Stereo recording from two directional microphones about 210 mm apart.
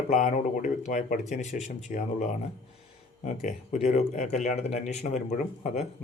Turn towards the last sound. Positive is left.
turn(degrees=35)  # may be behind; listen again after turning